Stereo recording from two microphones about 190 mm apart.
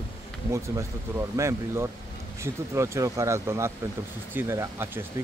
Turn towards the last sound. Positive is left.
turn(degrees=-15)  # may be behind; listen again after turning